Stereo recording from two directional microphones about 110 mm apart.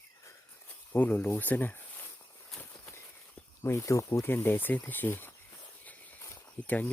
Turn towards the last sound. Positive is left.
turn(degrees=15)  # may be behind; listen again after turning